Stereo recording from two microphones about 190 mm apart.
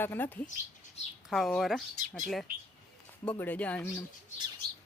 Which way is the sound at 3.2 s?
10° left (ahead or behind).